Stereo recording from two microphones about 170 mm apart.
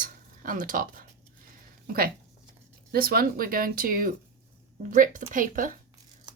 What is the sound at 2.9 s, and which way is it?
A woman's voice, 60° right (ahead or behind).